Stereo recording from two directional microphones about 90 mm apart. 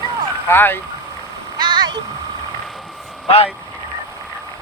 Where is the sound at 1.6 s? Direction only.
55° right (ahead or behind).